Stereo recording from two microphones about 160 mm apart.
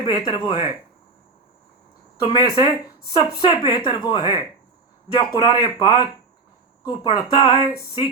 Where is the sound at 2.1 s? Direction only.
30° left (ahead or behind).